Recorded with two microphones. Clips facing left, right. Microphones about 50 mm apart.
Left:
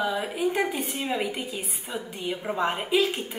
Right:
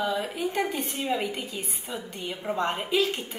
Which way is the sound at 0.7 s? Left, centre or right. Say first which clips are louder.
Even; centre.